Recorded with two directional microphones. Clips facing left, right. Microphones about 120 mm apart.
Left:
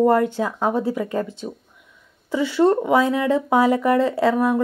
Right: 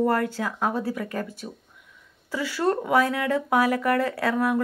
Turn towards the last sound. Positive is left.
turn(degrees=25)  # may be behind; listen again after turning